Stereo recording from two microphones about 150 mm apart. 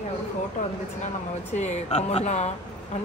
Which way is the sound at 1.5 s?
50° left (ahead or behind).